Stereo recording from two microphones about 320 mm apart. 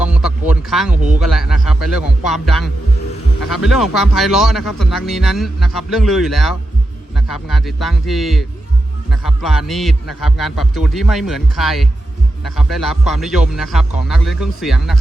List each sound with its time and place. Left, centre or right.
0.0 s speech: centre